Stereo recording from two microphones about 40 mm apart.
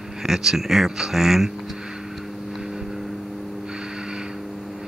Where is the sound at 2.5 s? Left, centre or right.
Centre.